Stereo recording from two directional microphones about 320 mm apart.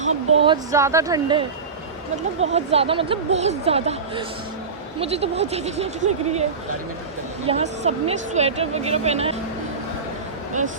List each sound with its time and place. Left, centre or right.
0.0 s speech: centre
7.4 s speech: centre